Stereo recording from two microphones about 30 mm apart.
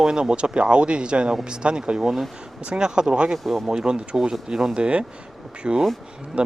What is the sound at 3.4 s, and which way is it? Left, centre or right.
Speech, centre.